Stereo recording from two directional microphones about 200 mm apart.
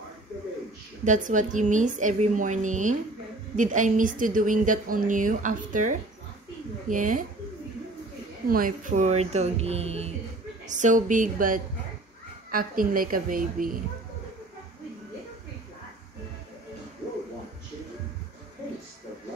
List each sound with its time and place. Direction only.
1.0 s a woman's voice: 40° right (ahead or behind)
8.5 s a woman's voice: 45° right (ahead or behind)